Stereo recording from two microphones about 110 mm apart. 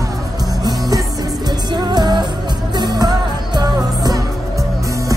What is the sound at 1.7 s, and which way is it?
Music, 40° right (ahead or behind).